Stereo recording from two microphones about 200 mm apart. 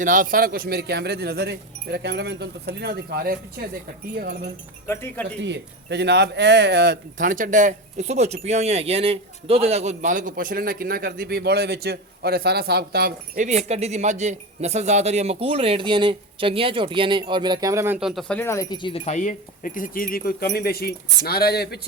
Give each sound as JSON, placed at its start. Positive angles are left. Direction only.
{"t": 0.0, "sound": "speech", "side_deg": -40}
{"t": 4.9, "sound": "speech", "side_deg": 10}
{"t": 5.4, "sound": "speech", "side_deg": -60}